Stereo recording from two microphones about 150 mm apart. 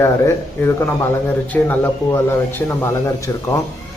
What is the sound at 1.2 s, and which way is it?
Speech, 15° left (ahead or behind).